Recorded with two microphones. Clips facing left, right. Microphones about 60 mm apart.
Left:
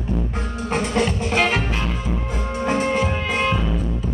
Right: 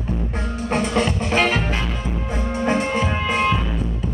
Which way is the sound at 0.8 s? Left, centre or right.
Right.